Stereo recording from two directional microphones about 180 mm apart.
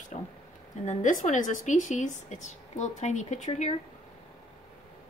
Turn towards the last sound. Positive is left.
turn(degrees=40)  # may be behind; listen again after turning